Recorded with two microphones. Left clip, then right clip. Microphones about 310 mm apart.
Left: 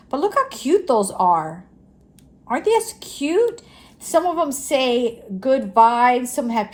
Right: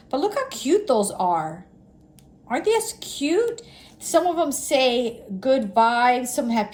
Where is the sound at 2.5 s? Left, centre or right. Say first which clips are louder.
Left 3 dB; centre.